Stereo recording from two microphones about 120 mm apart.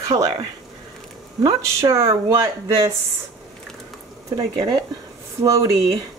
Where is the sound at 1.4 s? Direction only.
30° right (ahead or behind).